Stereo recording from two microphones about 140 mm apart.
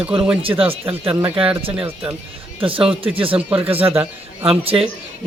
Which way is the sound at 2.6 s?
40° right (ahead or behind).